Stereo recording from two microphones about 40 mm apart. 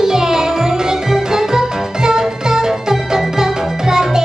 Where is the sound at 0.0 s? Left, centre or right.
Centre.